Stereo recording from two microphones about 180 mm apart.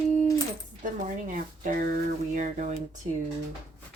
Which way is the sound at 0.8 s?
45° right (ahead or behind).